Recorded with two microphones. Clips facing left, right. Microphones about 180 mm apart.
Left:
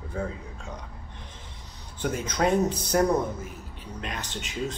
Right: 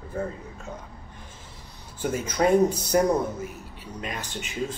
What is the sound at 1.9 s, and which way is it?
Speech, 5° right (ahead or behind).